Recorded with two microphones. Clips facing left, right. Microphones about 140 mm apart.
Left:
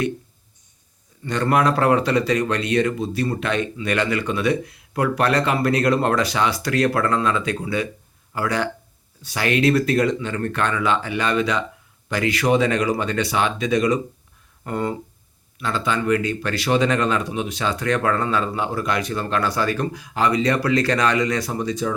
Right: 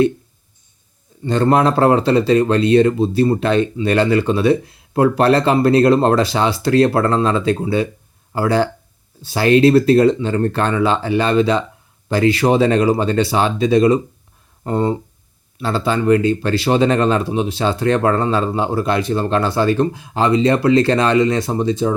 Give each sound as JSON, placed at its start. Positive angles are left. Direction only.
{"t": 1.2, "sound": "speech", "side_deg": -25}